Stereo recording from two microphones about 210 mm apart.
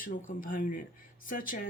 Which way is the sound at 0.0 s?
40° left (ahead or behind).